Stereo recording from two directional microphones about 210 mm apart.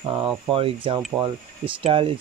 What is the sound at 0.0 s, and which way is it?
Speech, 20° right (ahead or behind).